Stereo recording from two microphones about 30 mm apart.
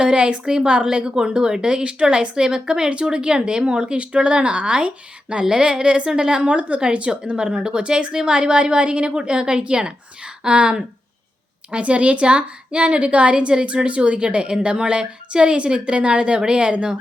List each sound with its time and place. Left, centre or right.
0.0 s a woman's voice: right
1.8 s a woman's voice: right
2.9 s a woman's voice: right
6.4 s a woman's voice: right
7.3 s a woman's voice: right